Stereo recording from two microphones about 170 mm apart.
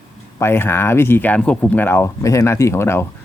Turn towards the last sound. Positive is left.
turn(degrees=15)  # may be behind; listen again after turning